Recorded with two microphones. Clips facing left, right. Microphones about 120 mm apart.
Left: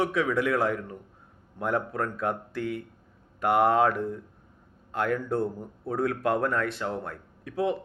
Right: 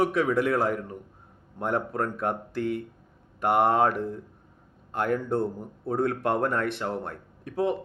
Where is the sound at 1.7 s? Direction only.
40° right (ahead or behind).